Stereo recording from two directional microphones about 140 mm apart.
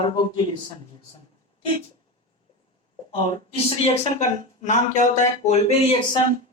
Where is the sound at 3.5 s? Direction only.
50° left (ahead or behind).